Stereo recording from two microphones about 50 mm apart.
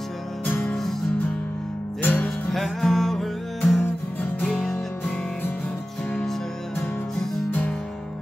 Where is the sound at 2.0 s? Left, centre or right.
Left.